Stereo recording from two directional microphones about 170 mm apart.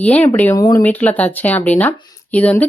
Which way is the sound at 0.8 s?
10° left (ahead or behind).